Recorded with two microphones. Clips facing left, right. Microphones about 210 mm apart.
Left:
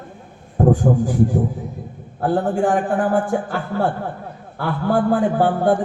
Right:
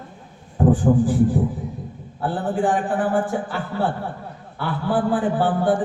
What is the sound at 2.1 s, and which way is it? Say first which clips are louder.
A man's voice: left 4 dB; 45° left (ahead or behind).